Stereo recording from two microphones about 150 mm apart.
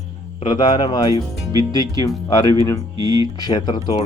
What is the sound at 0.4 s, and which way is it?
Speech, 30° left (ahead or behind).